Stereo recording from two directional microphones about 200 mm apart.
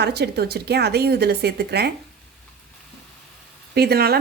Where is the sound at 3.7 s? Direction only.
55° right (ahead or behind).